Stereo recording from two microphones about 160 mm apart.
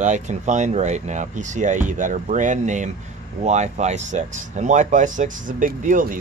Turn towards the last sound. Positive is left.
turn(degrees=-55)  # may be behind; listen again after turning